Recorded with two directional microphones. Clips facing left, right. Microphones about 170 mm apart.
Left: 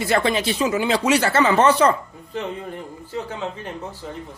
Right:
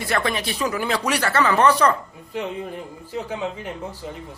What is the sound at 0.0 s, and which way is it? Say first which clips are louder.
Speech: left 4 dB; 25° left (ahead or behind).